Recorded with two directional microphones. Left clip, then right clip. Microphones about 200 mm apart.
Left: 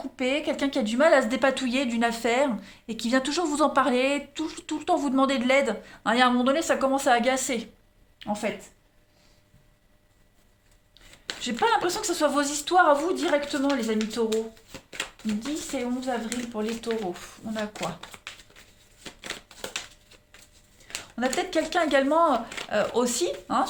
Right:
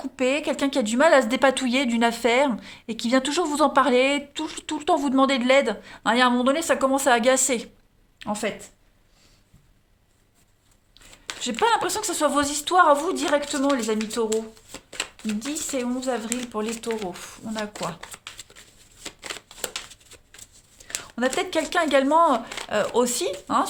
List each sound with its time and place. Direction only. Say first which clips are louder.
0.0 s a woman's voice: right 3 dB; 35° right (ahead or behind)
10.9 s speech: right 1 dB; 30° right (ahead or behind)
15.4 s speech: right 3 dB; 40° right (ahead or behind)
20.4 s a sound: right 5 dB; 35° right (ahead or behind)
21.3 s speech: even; 35° right (ahead or behind)